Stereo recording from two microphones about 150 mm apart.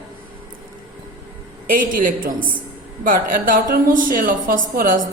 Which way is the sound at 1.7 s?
65° right (ahead or behind).